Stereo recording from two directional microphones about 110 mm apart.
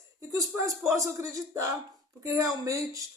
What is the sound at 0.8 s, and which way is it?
Speech, 30° right (ahead or behind).